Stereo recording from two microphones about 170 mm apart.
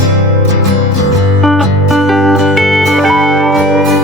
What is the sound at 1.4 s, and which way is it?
Music, centre (ahead or behind).